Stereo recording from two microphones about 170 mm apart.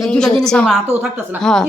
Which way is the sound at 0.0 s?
5° left (ahead or behind).